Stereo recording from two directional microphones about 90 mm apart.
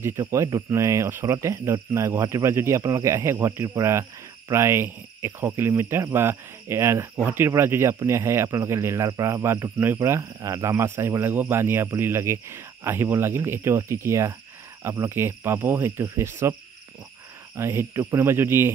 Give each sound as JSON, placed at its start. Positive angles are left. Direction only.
{"t": 0.3, "sound": "speech", "side_deg": -40}
{"t": 17.6, "sound": "speech", "side_deg": -30}